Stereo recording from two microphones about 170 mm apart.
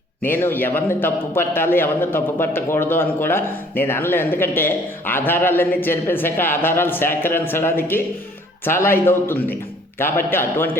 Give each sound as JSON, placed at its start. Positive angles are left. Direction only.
{"t": 0.3, "sound": "a man's voice", "side_deg": 10}